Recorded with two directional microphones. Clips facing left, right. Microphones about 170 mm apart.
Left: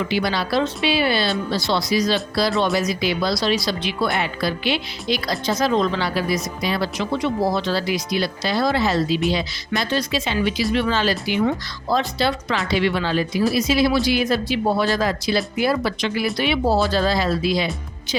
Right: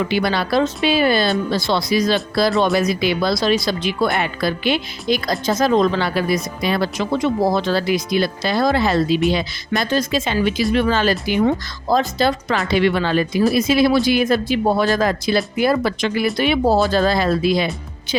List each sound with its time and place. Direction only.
0.1 s speech: 55° right (ahead or behind)